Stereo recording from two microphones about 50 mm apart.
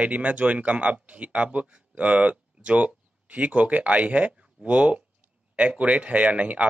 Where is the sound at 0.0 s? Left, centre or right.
Right.